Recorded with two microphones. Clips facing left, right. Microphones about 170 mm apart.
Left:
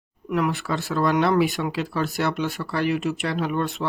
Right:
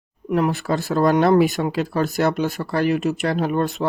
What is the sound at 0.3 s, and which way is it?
Speech, 35° right (ahead or behind).